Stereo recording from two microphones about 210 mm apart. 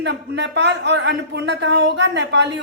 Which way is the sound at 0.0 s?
55° right (ahead or behind).